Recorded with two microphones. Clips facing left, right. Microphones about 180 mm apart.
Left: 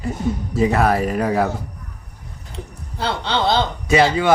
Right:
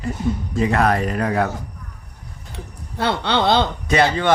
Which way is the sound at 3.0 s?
60° right (ahead or behind).